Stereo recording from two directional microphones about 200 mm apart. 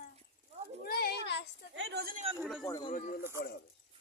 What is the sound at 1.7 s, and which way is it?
Speech, 60° right (ahead or behind).